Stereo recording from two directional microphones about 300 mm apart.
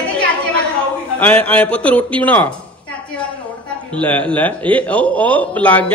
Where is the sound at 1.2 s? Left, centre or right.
Centre.